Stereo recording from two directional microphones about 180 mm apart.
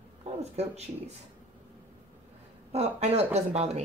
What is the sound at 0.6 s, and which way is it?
Speech, 35° right (ahead or behind).